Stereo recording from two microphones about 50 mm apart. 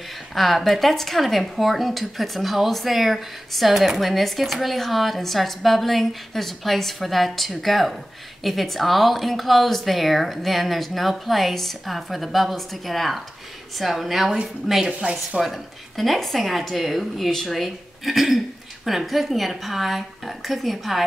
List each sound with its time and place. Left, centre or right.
0.3 s speech: centre
15.0 s speech: right
15.4 s speech: centre